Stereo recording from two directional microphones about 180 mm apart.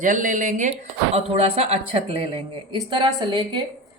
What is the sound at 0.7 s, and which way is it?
A woman's voice, 35° right (ahead or behind).